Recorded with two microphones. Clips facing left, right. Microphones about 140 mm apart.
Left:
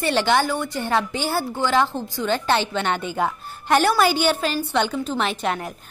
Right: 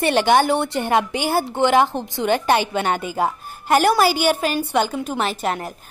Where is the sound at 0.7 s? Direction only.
15° right (ahead or behind).